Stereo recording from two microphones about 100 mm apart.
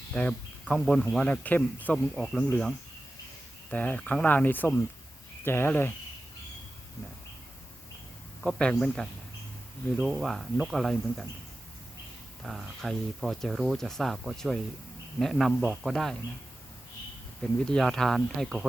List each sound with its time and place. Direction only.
0.1 s speech: 10° left (ahead or behind)
2.1 s speech: 5° left (ahead or behind)
3.7 s speech: 15° left (ahead or behind)
8.4 s speech: 10° left (ahead or behind)
10.1 s speech: centre (ahead or behind)
12.4 s speech: centre (ahead or behind)
17.4 s speech: 5° left (ahead or behind)